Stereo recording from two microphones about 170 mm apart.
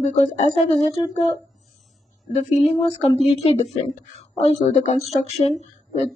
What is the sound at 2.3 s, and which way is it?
Speech, 40° left (ahead or behind).